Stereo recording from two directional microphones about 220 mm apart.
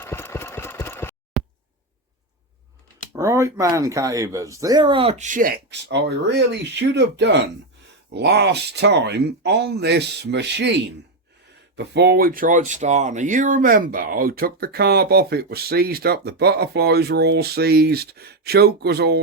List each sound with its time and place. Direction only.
0.0 s engine: 10° left (ahead or behind)
1.4 s a sound: centre (ahead or behind)
3.1 s speech: 15° right (ahead or behind); by 10.8 s 50° right (ahead or behind)
11.8 s speech: 50° right (ahead or behind)